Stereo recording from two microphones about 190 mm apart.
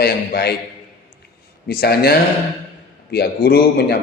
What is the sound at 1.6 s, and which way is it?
A man's voice, 55° left (ahead or behind).